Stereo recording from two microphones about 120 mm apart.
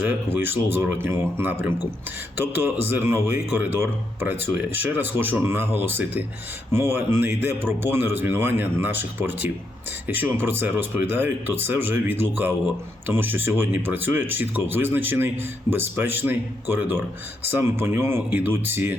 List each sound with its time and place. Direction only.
0.0 s speech: 15° right (ahead or behind)